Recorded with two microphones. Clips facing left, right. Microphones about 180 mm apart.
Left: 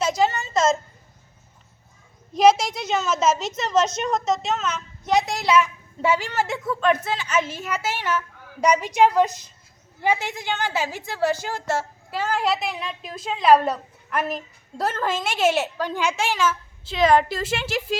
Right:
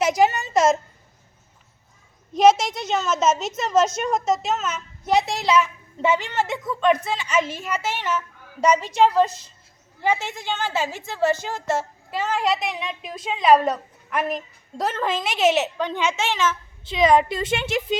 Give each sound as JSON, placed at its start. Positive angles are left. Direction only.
{"t": 0.0, "sound": "a woman's voice", "side_deg": -15}
{"t": 2.3, "sound": "a woman's voice", "side_deg": 0}
{"t": 5.2, "sound": "a woman's voice", "side_deg": -35}
{"t": 5.5, "sound": "a woman's voice", "side_deg": 5}